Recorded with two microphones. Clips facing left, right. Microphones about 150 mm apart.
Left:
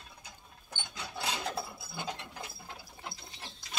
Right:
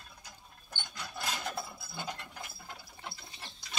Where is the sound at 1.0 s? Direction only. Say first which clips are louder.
Left 2 dB; 20° left (ahead or behind).